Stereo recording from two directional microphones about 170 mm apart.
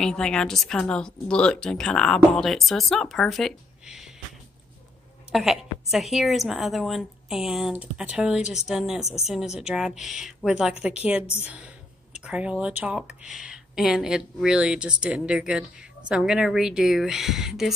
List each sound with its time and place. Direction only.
0.0 s speech: 5° left (ahead or behind)
5.3 s speech: centre (ahead or behind)
9.0 s speech: 40° left (ahead or behind)
9.6 s a woman's voice: 5° right (ahead or behind)